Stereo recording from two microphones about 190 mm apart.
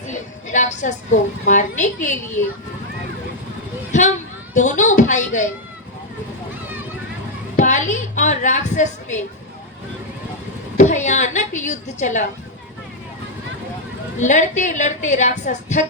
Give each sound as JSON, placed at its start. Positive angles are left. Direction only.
{"t": 0.1, "sound": "a woman's voice", "side_deg": 40}
{"t": 4.5, "sound": "a woman's voice", "side_deg": 40}
{"t": 7.5, "sound": "a woman's voice", "side_deg": 40}
{"t": 10.8, "sound": "a woman's voice", "side_deg": 40}
{"t": 14.2, "sound": "a woman's voice", "side_deg": 40}